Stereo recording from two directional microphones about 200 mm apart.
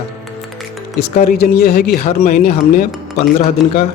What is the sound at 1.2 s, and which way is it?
Speech, 50° left (ahead or behind).